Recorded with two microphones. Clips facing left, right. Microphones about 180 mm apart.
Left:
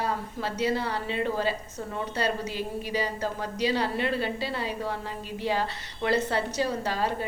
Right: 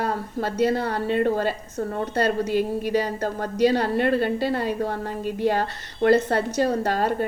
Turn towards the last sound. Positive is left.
turn(degrees=-55)  # may be behind; listen again after turning